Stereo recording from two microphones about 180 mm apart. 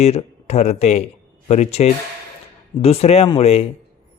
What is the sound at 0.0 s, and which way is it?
A man's voice, 35° left (ahead or behind).